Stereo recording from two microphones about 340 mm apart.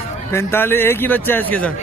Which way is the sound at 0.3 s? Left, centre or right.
Centre.